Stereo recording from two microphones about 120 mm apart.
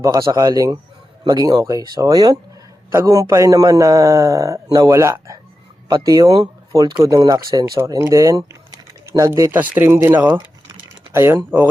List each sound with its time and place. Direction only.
0.0 s a man's voice: 30° right (ahead or behind)
10.7 s typing: 25° right (ahead or behind)